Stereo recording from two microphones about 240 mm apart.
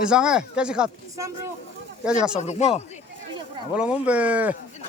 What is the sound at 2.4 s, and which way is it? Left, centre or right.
Speech, left.